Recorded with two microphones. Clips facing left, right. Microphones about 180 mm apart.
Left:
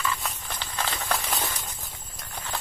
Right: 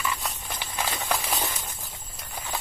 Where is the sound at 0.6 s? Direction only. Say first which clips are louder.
Right 1 dB; 10° right (ahead or behind).